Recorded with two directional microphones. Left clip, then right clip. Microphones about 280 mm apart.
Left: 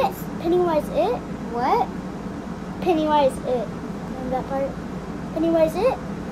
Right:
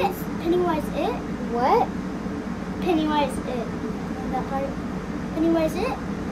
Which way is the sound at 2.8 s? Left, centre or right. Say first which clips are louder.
Left 4 dB; left.